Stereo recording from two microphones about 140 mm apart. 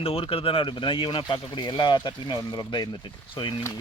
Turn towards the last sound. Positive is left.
turn(degrees=35)  # may be behind; listen again after turning